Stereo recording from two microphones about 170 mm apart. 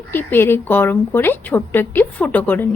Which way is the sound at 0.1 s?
10° left (ahead or behind).